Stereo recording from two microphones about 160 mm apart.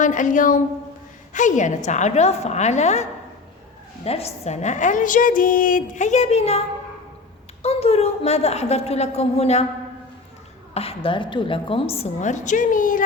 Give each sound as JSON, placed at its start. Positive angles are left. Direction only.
{"t": 0.0, "sound": "a woman's voice", "side_deg": 55}
{"t": 7.6, "sound": "a woman's voice", "side_deg": 40}
{"t": 10.8, "sound": "a woman's voice", "side_deg": 35}